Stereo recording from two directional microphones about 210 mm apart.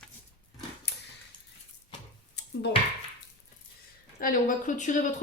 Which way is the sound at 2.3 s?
55° left (ahead or behind).